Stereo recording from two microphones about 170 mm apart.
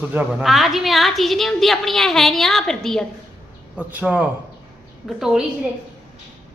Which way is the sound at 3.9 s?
10° right (ahead or behind).